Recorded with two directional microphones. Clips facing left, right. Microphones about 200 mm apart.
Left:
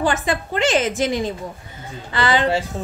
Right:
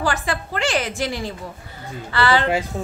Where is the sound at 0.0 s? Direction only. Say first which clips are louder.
Left 3 dB; 20° left (ahead or behind).